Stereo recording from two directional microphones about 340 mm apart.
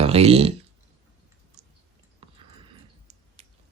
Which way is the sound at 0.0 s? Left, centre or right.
Centre.